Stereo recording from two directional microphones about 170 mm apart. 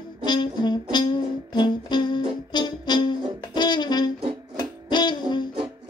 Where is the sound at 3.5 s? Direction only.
25° left (ahead or behind).